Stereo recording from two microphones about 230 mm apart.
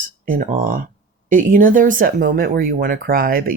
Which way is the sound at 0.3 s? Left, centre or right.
Right.